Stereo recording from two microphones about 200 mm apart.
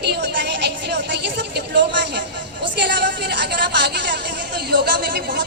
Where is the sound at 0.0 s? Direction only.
55° right (ahead or behind).